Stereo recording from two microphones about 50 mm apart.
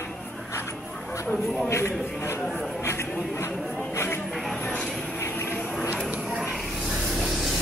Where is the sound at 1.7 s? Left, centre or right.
Left.